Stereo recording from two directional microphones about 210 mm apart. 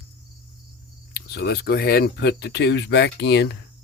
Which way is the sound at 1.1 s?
50° left (ahead or behind).